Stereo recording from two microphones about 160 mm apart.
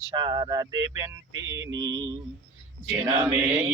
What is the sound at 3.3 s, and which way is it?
Mantra, 10° right (ahead or behind).